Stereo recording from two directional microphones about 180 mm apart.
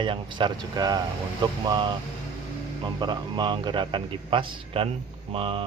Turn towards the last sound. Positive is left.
turn(degrees=-30)  # may be behind; listen again after turning